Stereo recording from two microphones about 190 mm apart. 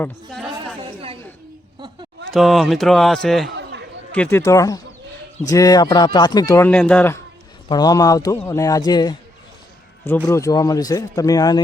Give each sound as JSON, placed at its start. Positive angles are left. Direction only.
{"t": 0.0, "sound": "a man's voice", "side_deg": 0}
{"t": 0.8, "sound": "a sound", "side_deg": -30}
{"t": 2.3, "sound": "a man's voice", "side_deg": 0}
{"t": 3.5, "sound": "chatter", "side_deg": -65}
{"t": 4.1, "sound": "speech", "side_deg": 10}
{"t": 7.7, "sound": "a man's voice", "side_deg": 20}
{"t": 10.2, "sound": "a man's voice", "side_deg": 15}